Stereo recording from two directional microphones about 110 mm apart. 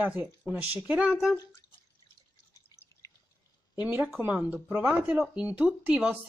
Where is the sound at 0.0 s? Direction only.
15° right (ahead or behind).